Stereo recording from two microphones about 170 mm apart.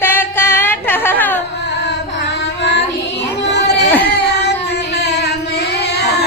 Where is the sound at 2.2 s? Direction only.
90° left.